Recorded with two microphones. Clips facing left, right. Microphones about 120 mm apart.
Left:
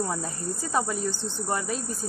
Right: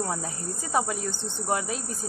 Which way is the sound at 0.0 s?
15° right (ahead or behind).